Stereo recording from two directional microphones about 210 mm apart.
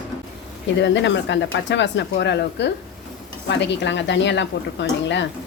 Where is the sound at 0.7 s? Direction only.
55° left (ahead or behind).